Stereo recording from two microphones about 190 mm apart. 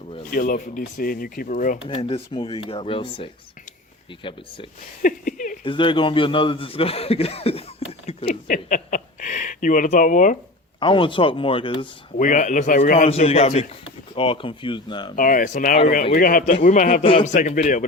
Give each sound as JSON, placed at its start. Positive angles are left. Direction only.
{"t": 0.2, "sound": "speech", "side_deg": 50}
{"t": 1.8, "sound": "a man's voice", "side_deg": 30}
{"t": 5.0, "sound": "speech", "side_deg": 45}
{"t": 5.6, "sound": "a man's voice", "side_deg": 25}
{"t": 8.0, "sound": "a sound", "side_deg": 30}
{"t": 8.4, "sound": "speech", "side_deg": 45}
{"t": 10.8, "sound": "a man's voice", "side_deg": 25}
{"t": 12.1, "sound": "a man's voice", "side_deg": 40}
{"t": 15.1, "sound": "speech", "side_deg": 45}
{"t": 17.0, "sound": "a man's voice", "side_deg": 30}
{"t": 17.3, "sound": "a man's voice", "side_deg": 45}